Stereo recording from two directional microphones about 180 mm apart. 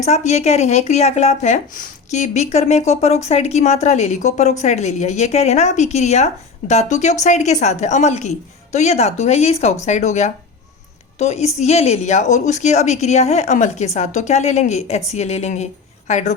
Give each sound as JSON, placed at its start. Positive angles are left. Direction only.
{"t": 0.0, "sound": "speech", "side_deg": 40}